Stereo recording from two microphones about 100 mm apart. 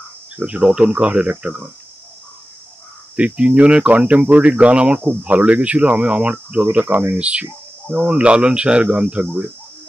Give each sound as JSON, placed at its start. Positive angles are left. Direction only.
{"t": 0.4, "sound": "speech", "side_deg": -10}
{"t": 3.2, "sound": "speech", "side_deg": -10}